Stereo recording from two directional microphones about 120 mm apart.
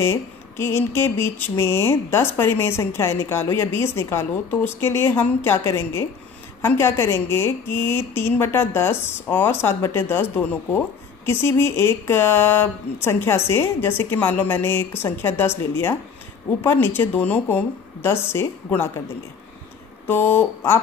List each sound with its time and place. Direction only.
0.0 s a sound: 20° left (ahead or behind)
16.6 s a woman's voice: 20° left (ahead or behind)
20.1 s a woman's voice: 15° left (ahead or behind)